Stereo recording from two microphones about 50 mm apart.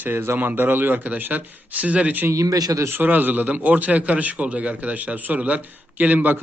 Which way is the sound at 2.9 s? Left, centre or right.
Right.